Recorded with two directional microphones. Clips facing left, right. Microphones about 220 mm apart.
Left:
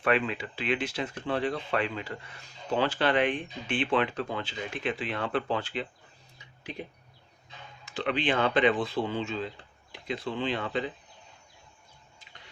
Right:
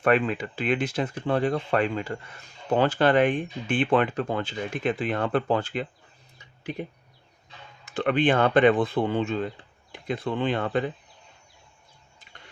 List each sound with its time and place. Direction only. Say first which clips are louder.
0.0 s speech: right 5 dB; 45° right (ahead or behind)
7.9 s speech: right 6 dB; 50° right (ahead or behind)